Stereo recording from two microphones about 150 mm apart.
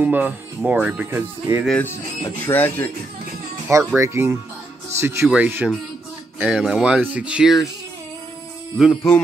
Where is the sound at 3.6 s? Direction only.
20° right (ahead or behind).